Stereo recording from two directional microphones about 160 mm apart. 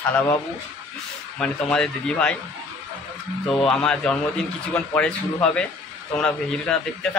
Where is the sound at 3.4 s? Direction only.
5° left (ahead or behind).